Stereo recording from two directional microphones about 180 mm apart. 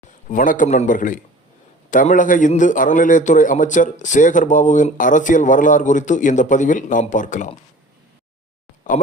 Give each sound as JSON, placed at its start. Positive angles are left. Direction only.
{"t": 0.3, "sound": "a man's voice", "side_deg": 45}